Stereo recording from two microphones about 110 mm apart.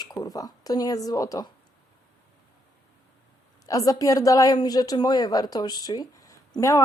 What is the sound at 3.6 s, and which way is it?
A woman's voice, 35° left (ahead or behind).